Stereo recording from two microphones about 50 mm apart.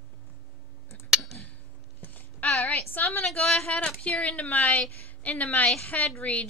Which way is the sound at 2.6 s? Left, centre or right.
Left.